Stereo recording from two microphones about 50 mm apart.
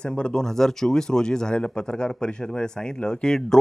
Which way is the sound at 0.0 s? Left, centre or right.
Centre.